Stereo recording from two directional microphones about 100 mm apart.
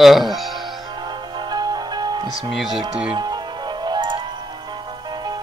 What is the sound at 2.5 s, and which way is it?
Speech, 5° right (ahead or behind).